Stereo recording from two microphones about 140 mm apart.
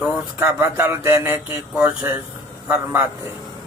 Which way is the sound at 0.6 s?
20° right (ahead or behind).